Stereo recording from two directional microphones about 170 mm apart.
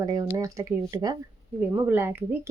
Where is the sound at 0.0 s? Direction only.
20° right (ahead or behind).